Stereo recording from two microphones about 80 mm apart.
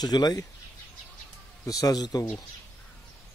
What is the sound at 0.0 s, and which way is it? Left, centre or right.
Speech, left.